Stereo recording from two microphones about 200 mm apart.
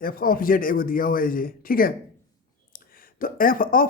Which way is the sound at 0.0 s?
45° left (ahead or behind).